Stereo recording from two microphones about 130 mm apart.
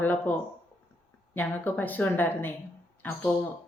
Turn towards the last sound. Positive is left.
turn(degrees=15)  # may be behind; listen again after turning